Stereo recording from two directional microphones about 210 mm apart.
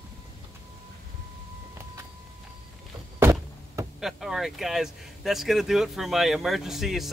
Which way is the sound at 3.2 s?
15° right (ahead or behind).